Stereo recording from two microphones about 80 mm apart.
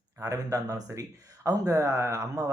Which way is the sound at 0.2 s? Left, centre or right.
Right.